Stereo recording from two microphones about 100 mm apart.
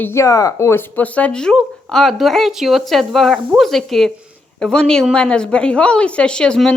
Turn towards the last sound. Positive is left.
turn(degrees=10)  # may be behind; listen again after turning